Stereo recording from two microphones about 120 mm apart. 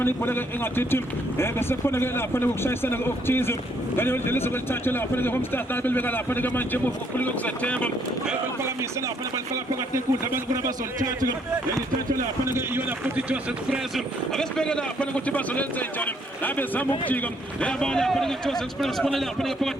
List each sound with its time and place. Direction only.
0.0 s speech: 15° left (ahead or behind)
9.9 s a man's voice: 25° right (ahead or behind)
12.5 s a man's voice: 25° right (ahead or behind)
13.1 s speech: 5° right (ahead or behind)